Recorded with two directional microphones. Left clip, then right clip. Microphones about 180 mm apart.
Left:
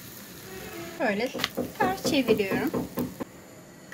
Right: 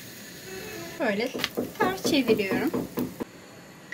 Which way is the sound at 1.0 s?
30° left (ahead or behind).